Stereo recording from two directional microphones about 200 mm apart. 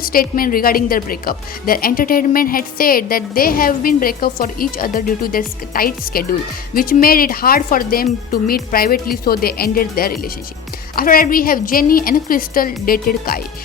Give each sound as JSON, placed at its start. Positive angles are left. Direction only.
{"t": 0.0, "sound": "speech", "side_deg": 45}